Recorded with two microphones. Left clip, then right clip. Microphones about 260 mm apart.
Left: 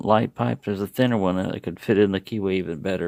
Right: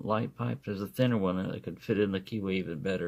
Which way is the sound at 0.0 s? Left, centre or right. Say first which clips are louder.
Left 12 dB; left.